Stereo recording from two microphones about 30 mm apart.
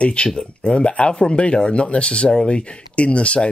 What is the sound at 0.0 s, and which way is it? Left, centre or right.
Speech, left.